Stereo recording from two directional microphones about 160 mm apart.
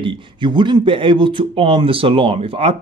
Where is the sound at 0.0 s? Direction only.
30° right (ahead or behind).